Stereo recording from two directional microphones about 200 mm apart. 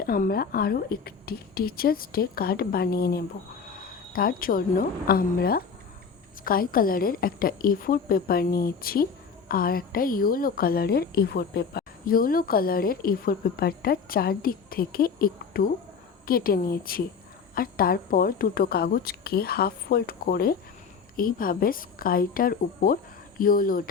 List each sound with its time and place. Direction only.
0.0 s a woman's voice: 50° left (ahead or behind)